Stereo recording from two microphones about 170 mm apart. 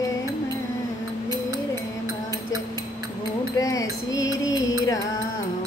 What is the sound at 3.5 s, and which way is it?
Music, 20° left (ahead or behind).